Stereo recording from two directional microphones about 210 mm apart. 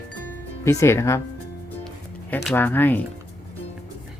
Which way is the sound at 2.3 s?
5° left (ahead or behind).